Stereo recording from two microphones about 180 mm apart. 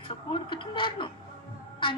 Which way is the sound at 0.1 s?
30° left (ahead or behind).